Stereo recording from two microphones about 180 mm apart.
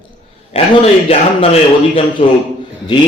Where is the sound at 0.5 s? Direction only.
35° left (ahead or behind).